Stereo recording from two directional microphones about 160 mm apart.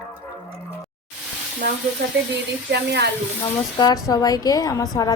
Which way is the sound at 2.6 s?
90° right.